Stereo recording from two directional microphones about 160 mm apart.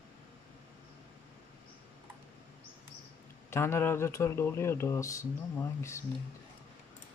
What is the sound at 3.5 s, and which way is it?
Speech, 15° left (ahead or behind).